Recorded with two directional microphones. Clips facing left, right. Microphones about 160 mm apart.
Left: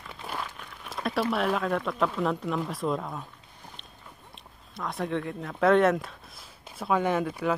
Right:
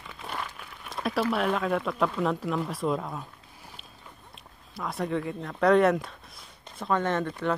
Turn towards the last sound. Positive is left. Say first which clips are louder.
# left 1 dB
turn(degrees=10)  # may be behind; listen again after turning